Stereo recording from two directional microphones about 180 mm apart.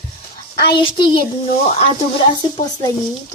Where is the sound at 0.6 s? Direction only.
25° left (ahead or behind).